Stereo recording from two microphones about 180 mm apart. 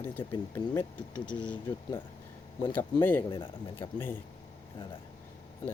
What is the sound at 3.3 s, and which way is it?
Speech, 25° left (ahead or behind).